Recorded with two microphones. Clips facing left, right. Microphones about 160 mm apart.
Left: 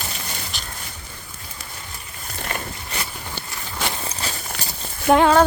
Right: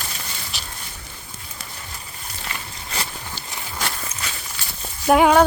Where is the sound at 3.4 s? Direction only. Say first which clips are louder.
Left 4 dB; 55° left (ahead or behind).